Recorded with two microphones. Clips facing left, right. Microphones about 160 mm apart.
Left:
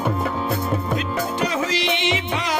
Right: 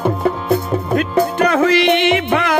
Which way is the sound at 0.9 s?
60° right (ahead or behind).